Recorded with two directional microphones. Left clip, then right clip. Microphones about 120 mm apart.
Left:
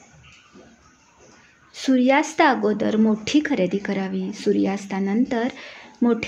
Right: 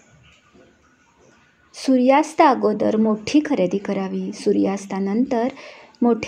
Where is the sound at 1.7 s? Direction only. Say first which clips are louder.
Right 3 dB; 15° right (ahead or behind).